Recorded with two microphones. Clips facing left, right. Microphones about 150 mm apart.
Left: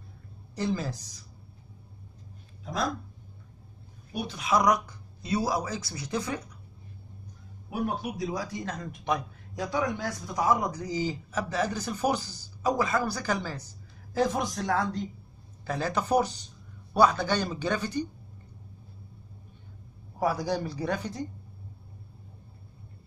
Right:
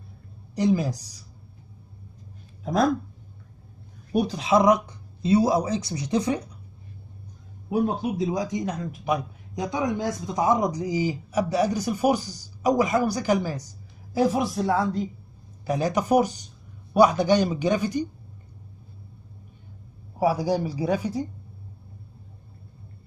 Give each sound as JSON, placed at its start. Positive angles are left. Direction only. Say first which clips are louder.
{"t": 0.6, "sound": "speech", "louder": "right 7 dB", "side_deg": -15}
{"t": 2.6, "sound": "speech", "louder": "right 9 dB", "side_deg": -50}
{"t": 4.1, "sound": "a woman's voice", "louder": "right 11 dB", "side_deg": -45}
{"t": 4.4, "sound": "speech", "louder": "right 4 dB", "side_deg": -25}
{"t": 7.7, "sound": "speech", "louder": "right 7 dB", "side_deg": -25}
{"t": 9.6, "sound": "speech", "louder": "right 3 dB", "side_deg": -20}
{"t": 20.2, "sound": "speech", "louder": "right 5 dB", "side_deg": -10}